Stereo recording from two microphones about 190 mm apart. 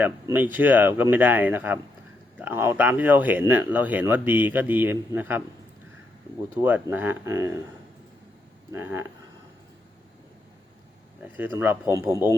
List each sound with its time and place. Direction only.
0.0 s speech: 10° right (ahead or behind)
6.6 s speech: 10° right (ahead or behind)
8.7 s speech: 10° right (ahead or behind)
11.2 s speech: 10° right (ahead or behind)